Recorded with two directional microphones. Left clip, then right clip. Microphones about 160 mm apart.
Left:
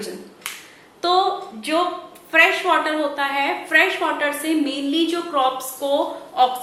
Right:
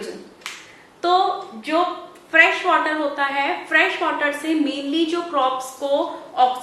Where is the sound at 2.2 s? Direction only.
10° left (ahead or behind).